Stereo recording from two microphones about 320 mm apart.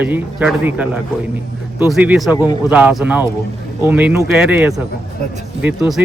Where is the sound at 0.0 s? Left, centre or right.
Centre.